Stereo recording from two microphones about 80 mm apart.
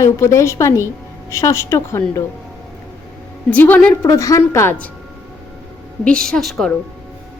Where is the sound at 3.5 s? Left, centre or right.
Left.